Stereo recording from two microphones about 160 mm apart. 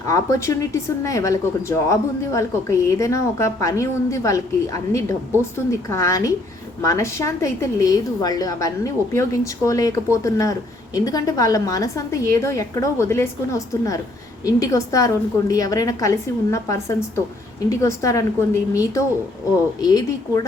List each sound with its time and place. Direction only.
0.0 s a woman's voice: 20° left (ahead or behind)